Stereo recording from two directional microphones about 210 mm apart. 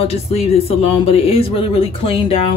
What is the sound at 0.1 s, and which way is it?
Speech, 30° left (ahead or behind).